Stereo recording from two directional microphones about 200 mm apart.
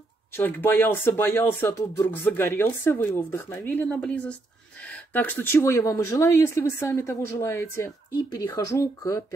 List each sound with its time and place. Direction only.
0.3 s speech: 10° left (ahead or behind)